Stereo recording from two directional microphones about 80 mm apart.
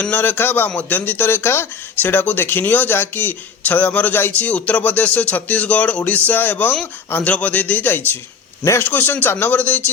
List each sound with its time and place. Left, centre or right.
0.0 s speech: left